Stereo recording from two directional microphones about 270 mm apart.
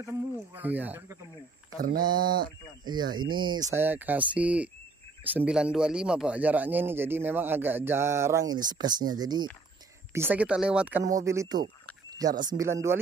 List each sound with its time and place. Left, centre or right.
0.0 s speech: centre
1.8 s speech: right
2.8 s speech: centre